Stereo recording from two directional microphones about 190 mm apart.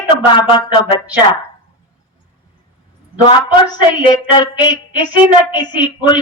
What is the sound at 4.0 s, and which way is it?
Speech, 25° left (ahead or behind).